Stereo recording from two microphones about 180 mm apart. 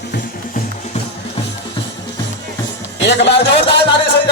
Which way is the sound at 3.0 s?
70° left (ahead or behind).